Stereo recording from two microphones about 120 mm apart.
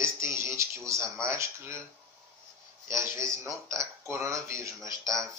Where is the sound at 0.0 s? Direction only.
25° right (ahead or behind).